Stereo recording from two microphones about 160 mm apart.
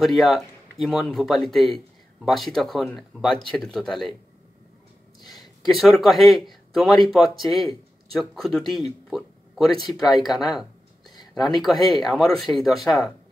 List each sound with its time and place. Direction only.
0.0 s speech: centre (ahead or behind)
5.2 s speech: centre (ahead or behind)